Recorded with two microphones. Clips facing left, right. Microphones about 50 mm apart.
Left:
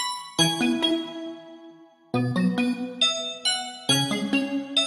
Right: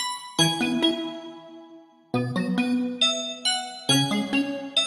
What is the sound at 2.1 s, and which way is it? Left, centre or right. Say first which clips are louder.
Music: left 1 dB; centre.